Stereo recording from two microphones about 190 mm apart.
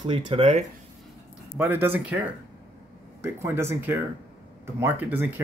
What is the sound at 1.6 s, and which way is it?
Speech, 10° right (ahead or behind).